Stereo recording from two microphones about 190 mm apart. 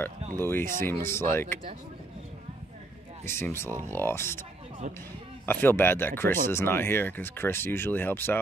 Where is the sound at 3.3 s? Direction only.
10° left (ahead or behind).